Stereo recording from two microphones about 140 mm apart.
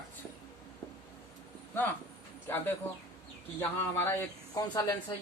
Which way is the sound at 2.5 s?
15° left (ahead or behind).